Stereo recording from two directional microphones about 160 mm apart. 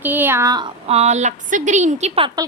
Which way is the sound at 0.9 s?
45° right (ahead or behind).